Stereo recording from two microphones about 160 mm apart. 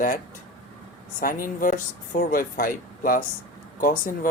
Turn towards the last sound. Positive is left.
turn(degrees=60)  # may be behind; listen again after turning